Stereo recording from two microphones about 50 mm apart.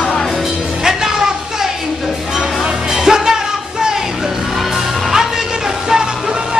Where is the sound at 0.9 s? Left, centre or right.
Centre.